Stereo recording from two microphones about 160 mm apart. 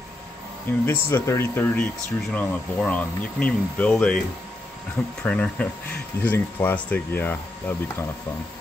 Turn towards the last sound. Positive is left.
turn(degrees=10)  # may be behind; listen again after turning